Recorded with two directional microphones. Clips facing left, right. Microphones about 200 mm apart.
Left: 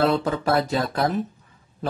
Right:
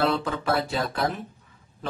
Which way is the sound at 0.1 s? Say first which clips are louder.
Left 4 dB; 40° left (ahead or behind).